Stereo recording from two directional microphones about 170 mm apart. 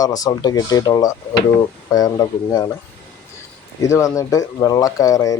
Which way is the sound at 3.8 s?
20° left (ahead or behind).